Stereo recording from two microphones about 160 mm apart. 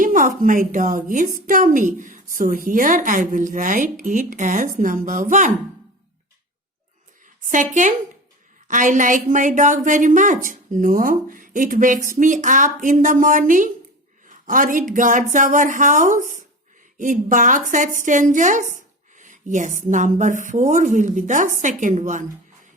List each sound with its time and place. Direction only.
0.0 s a woman's voice: 55° right (ahead or behind)
7.4 s a woman's voice: 55° right (ahead or behind)